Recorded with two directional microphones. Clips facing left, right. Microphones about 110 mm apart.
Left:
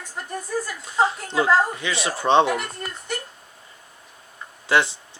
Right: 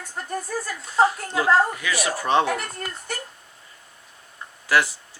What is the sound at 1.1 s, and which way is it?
Speech, 25° left (ahead or behind).